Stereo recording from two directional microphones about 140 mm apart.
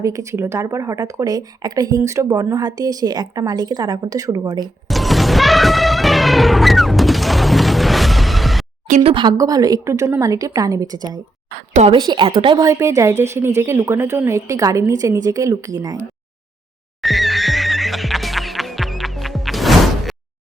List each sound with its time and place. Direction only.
0.0 s speech: 25° right (ahead or behind)
4.9 s music: centre (ahead or behind)
9.0 s a woman's voice: 35° right (ahead or behind)
9.4 s speech: 25° right (ahead or behind)
11.5 s a woman's voice: 65° right (ahead or behind)
11.9 s a woman's voice: 30° right (ahead or behind)
17.0 s music: centre (ahead or behind)